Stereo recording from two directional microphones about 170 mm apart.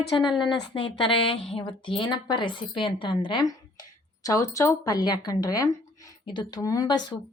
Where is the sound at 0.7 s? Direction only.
30° left (ahead or behind).